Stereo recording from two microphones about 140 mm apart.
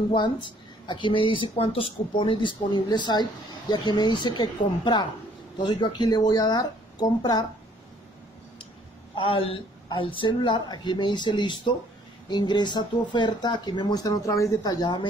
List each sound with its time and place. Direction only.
0.1 s speech: 35° left (ahead or behind)
9.1 s speech: 40° left (ahead or behind)